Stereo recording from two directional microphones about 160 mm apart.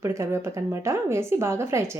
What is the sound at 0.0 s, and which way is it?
A woman's voice, 20° right (ahead or behind).